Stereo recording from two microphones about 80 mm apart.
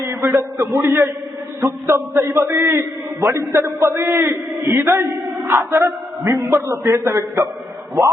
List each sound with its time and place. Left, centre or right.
0.0 s a man's voice: right